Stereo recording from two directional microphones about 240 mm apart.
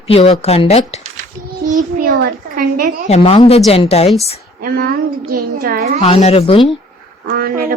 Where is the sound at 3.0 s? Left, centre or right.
Left.